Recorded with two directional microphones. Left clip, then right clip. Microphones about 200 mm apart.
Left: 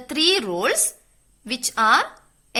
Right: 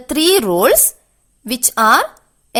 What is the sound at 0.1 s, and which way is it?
A woman's voice, 55° right (ahead or behind).